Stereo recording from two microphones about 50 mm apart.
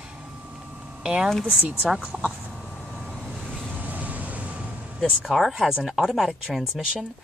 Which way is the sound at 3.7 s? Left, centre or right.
Right.